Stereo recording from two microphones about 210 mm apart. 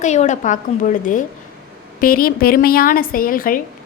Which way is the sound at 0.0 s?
35° left (ahead or behind).